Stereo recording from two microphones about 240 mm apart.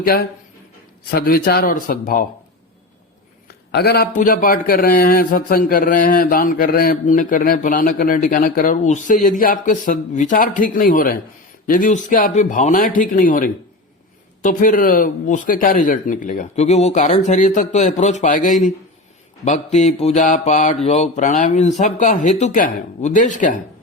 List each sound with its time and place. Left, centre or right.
0.0 s a man's voice: left
3.7 s a man's voice: left
19.5 s mantra: left
20.8 s a man's voice: left